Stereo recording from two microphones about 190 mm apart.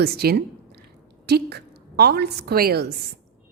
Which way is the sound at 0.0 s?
55° right (ahead or behind).